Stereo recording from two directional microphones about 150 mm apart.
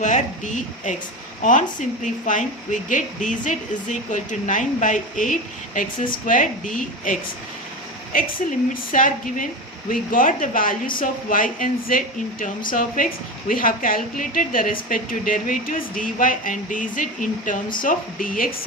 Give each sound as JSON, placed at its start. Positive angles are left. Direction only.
{"t": 0.0, "sound": "a woman's voice", "side_deg": 55}